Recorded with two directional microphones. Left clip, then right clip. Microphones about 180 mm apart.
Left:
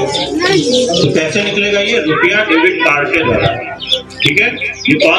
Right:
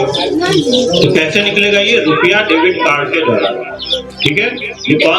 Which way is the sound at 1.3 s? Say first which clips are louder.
Right 2 dB; 50° right (ahead or behind).